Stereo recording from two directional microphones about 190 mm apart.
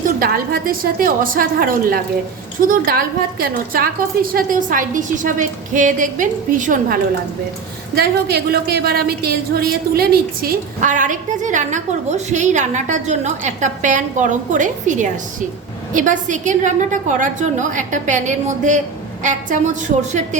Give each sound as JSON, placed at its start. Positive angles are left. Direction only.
{"t": 0.2, "sound": "a woman's voice", "side_deg": -50}
{"t": 7.9, "sound": "a woman's voice", "side_deg": -55}